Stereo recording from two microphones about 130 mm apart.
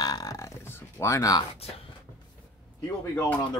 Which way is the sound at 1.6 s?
50° left (ahead or behind).